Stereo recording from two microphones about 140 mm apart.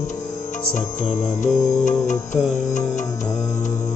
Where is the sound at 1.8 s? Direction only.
60° left (ahead or behind).